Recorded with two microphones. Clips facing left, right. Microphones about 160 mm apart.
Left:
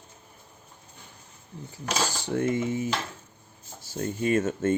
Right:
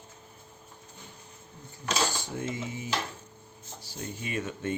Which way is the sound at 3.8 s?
45° left (ahead or behind).